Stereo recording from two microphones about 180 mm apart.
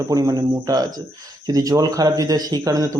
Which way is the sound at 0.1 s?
20° right (ahead or behind).